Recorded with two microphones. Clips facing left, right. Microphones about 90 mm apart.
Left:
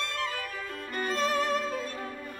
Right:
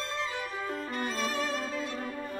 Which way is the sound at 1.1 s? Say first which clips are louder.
Left 7 dB; 50° left (ahead or behind).